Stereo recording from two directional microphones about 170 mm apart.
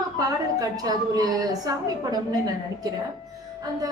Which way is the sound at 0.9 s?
20° right (ahead or behind).